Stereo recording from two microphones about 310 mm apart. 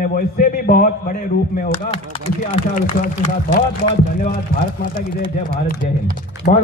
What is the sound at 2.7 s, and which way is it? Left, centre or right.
A man's voice, left.